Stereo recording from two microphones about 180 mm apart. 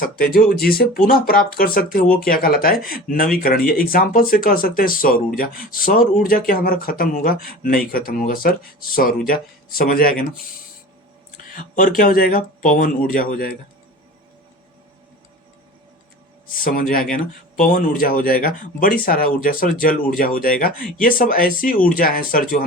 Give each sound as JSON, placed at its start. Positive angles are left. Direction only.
{"t": 0.0, "sound": "speech", "side_deg": 55}
{"t": 11.3, "sound": "speech", "side_deg": 45}
{"t": 16.6, "sound": "speech", "side_deg": 50}